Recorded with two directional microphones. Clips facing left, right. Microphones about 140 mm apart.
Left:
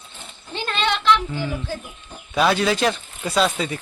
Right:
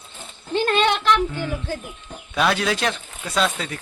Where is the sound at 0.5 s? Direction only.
50° right (ahead or behind).